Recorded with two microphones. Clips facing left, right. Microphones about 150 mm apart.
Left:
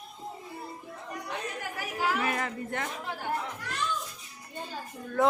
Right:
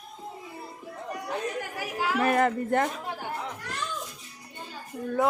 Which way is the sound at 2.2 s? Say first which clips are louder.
Right 8 dB; 45° right (ahead or behind).